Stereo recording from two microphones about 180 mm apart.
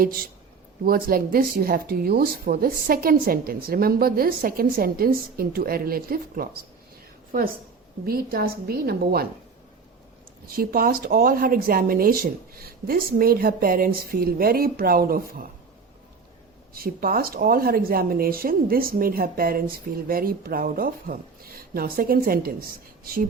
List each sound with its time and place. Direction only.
0.0 s speech: 55° right (ahead or behind)
8.0 s speech: 55° right (ahead or behind)
10.5 s speech: 55° right (ahead or behind)
16.7 s speech: 55° right (ahead or behind)